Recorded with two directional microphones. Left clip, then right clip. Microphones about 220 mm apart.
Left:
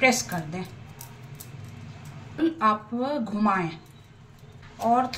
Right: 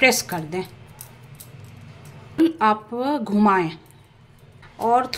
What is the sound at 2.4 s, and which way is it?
A woman's voice, 50° right (ahead or behind).